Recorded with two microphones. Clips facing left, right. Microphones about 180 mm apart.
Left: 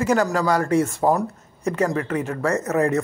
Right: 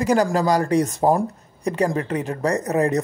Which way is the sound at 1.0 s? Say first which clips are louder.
Right 1 dB; 20° right (ahead or behind).